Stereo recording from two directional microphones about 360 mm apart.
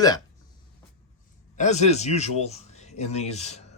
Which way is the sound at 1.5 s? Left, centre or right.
Centre.